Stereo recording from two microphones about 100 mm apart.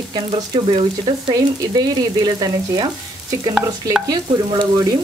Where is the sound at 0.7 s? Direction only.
70° right (ahead or behind).